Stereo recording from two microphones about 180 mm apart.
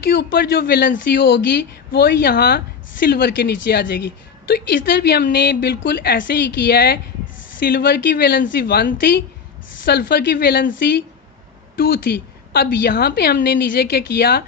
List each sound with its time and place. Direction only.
0.1 s speech: 55° left (ahead or behind)
12.5 s speech: 55° left (ahead or behind)